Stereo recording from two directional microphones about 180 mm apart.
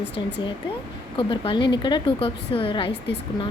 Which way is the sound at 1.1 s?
30° left (ahead or behind).